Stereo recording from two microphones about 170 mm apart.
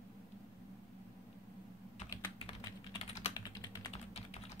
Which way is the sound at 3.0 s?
40° left (ahead or behind).